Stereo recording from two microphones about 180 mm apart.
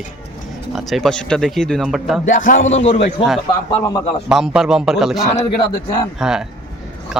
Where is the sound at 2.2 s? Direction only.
45° left (ahead or behind).